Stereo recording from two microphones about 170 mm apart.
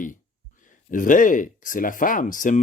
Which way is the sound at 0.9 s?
50° left (ahead or behind).